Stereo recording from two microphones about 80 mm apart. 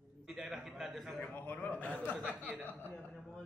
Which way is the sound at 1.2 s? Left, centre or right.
Left.